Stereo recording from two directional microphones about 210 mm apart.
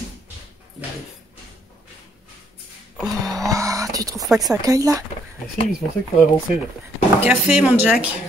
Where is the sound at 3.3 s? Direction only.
15° right (ahead or behind).